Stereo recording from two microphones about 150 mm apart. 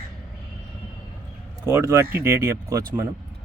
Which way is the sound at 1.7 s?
15° right (ahead or behind).